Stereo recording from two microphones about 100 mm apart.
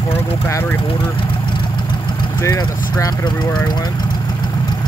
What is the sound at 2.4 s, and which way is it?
Speech, 35° left (ahead or behind).